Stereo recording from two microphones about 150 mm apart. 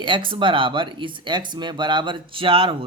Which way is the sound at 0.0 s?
35° right (ahead or behind).